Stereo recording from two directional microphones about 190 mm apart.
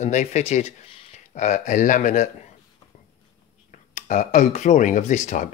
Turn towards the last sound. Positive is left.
turn(degrees=40)  # may be behind; listen again after turning